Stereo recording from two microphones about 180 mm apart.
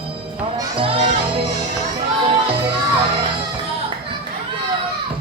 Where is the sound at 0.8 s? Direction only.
30° right (ahead or behind).